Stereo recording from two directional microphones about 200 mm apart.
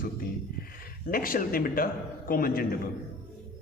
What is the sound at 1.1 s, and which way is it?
A man's voice, 45° left (ahead or behind).